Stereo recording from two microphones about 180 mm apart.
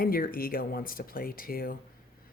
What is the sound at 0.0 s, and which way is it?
Speech, 55° left (ahead or behind).